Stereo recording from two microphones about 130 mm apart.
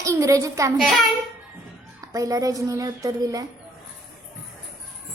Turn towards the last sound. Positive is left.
turn(degrees=-30)  # may be behind; listen again after turning